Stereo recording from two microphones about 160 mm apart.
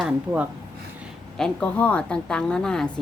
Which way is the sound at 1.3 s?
5° left (ahead or behind).